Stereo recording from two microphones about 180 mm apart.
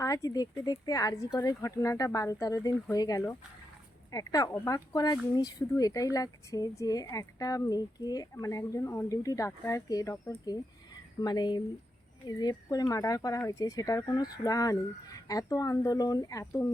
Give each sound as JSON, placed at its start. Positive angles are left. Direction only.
{"t": 0.0, "sound": "speech", "side_deg": 20}